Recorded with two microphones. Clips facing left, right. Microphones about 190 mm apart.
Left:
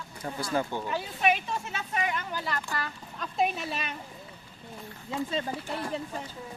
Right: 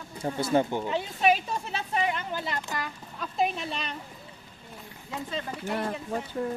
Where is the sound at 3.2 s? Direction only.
Centre (ahead or behind).